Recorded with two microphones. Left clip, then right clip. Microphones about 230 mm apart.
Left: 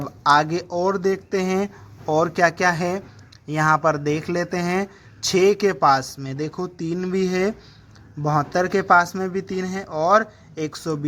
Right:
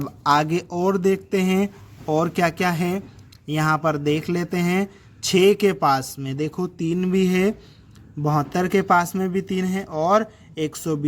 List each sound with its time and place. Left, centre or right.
0.0 s speech: right